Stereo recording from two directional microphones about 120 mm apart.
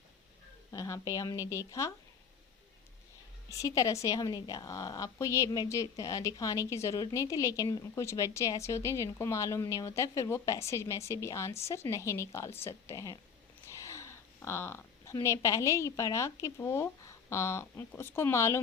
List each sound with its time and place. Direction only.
0.7 s a woman's voice: 25° left (ahead or behind)
3.5 s a woman's voice: 30° left (ahead or behind)